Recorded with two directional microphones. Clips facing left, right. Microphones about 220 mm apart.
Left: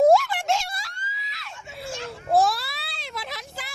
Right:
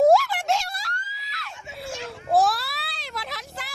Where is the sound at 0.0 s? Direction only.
Centre (ahead or behind).